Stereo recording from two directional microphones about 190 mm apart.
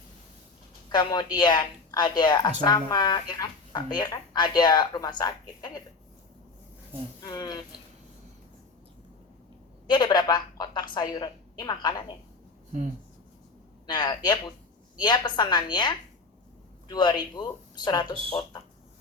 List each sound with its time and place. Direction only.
0.9 s a woman's voice: 20° left (ahead or behind)
7.2 s a woman's voice: 20° left (ahead or behind)
9.9 s a woman's voice: 20° left (ahead or behind)
13.8 s a woman's voice: 20° left (ahead or behind)